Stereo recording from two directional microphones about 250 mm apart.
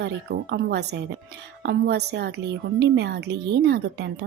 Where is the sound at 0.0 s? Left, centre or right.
Right.